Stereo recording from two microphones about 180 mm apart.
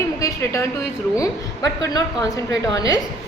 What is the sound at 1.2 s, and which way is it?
A woman's voice, 20° left (ahead or behind).